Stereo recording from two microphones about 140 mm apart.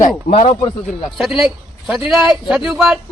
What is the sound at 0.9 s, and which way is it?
Speech, centre (ahead or behind).